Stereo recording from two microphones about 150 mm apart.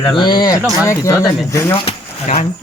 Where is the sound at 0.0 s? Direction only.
30° left (ahead or behind).